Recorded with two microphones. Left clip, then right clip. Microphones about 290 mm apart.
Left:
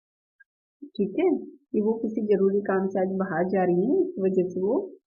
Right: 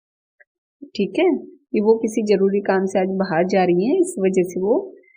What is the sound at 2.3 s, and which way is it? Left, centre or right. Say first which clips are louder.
A woman's voice: right 5 dB; right.